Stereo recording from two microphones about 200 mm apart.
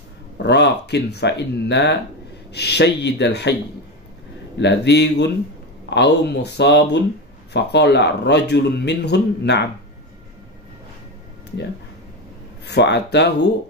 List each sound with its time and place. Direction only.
0.4 s speech: 60° left (ahead or behind)
4.6 s speech: 60° left (ahead or behind)
12.6 s speech: 60° left (ahead or behind)